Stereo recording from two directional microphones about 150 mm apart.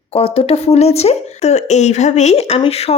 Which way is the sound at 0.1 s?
40° left (ahead or behind).